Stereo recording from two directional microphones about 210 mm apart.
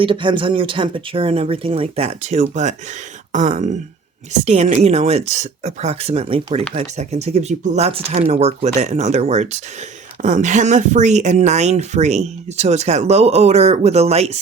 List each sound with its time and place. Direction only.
0.0 s speech: 25° right (ahead or behind)